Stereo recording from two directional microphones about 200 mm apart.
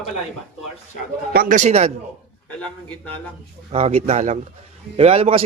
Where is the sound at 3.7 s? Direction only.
30° right (ahead or behind).